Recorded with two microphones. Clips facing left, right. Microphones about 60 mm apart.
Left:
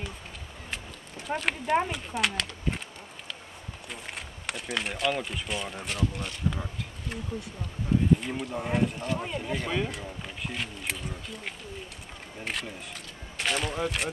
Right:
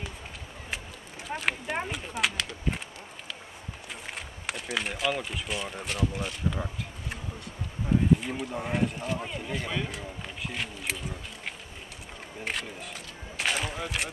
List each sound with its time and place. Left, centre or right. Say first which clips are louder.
1.2 s speech: left 1 dB; centre
3.9 s speech: even; centre
8.2 s speech: even; centre
13.4 s a sound: left 2 dB; centre